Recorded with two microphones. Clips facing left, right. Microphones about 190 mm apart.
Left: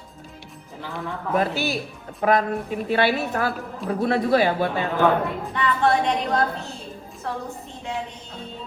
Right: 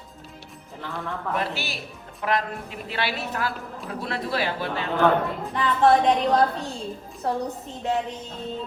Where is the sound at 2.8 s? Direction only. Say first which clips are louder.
Left 8 dB; 50° left (ahead or behind).